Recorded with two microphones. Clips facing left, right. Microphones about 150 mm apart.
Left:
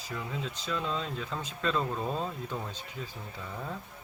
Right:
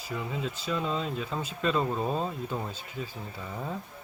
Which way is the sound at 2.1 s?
10° right (ahead or behind).